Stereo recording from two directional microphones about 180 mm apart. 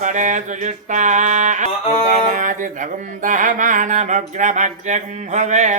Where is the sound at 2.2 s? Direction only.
45° right (ahead or behind).